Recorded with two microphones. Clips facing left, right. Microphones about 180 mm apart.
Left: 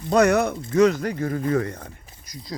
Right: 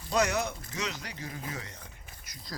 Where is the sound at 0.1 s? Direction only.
55° left (ahead or behind).